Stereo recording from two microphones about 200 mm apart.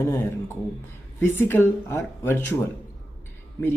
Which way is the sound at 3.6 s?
15° left (ahead or behind).